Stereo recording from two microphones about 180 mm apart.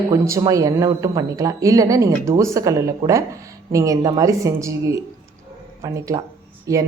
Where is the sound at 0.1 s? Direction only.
20° right (ahead or behind).